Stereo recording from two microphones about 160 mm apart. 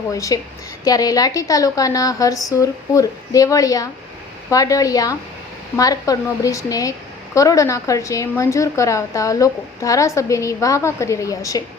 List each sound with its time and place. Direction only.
0.1 s speech: 20° left (ahead or behind)